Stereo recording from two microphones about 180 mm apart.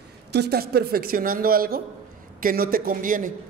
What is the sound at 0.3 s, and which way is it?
Speech, 65° right (ahead or behind).